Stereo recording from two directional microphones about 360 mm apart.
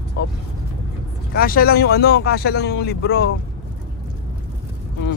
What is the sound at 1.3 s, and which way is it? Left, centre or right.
A man's voice, left.